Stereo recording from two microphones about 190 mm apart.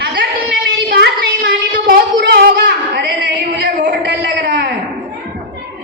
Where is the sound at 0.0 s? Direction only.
55° right (ahead or behind).